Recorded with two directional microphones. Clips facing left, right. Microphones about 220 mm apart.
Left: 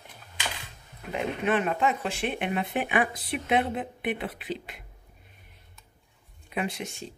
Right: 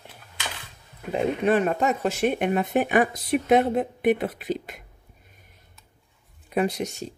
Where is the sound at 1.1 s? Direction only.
40° right (ahead or behind).